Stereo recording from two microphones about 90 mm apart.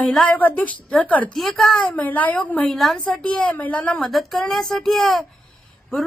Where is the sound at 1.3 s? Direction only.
5° left (ahead or behind).